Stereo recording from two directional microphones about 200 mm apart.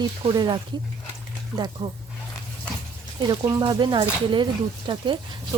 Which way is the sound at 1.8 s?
15° right (ahead or behind).